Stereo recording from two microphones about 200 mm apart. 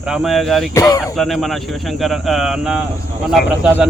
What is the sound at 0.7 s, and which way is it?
Speech, 15° left (ahead or behind).